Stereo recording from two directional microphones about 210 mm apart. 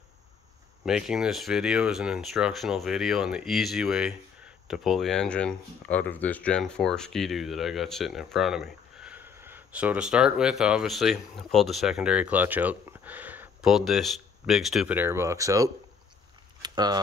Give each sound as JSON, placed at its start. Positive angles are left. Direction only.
{"t": 0.8, "sound": "speech", "side_deg": -5}